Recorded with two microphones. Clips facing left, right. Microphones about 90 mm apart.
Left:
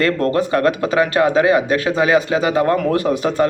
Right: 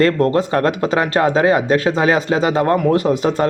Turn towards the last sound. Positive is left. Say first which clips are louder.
# right 1 dB
turn(degrees=-30)  # may be behind; listen again after turning